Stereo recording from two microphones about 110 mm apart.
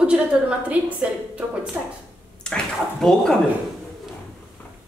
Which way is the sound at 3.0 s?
5° left (ahead or behind).